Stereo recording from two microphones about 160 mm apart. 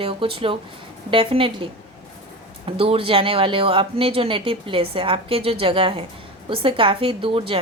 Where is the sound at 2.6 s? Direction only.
35° right (ahead or behind).